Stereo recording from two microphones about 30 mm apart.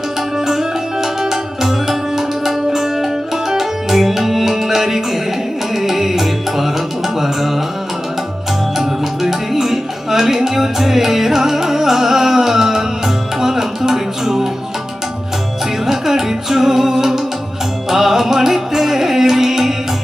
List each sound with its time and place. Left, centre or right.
1.2 s tabla: centre
3.6 s music: centre
8.8 s music: centre
15.9 s music: centre